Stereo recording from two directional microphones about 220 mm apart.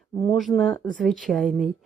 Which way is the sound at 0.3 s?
Centre (ahead or behind).